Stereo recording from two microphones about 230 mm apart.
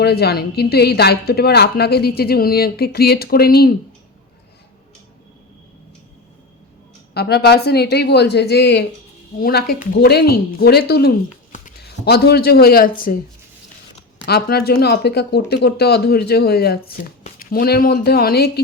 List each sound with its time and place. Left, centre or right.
0.0 s speech: left
7.1 s speech: left
14.3 s speech: left